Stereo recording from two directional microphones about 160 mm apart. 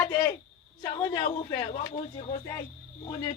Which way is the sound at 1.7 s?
50° left (ahead or behind).